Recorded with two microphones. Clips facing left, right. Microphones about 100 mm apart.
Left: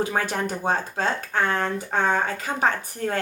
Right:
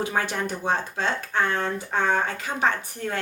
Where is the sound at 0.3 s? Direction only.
45° left (ahead or behind).